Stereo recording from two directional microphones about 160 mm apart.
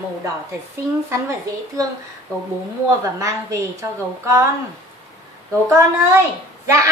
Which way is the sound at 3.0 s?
20° right (ahead or behind).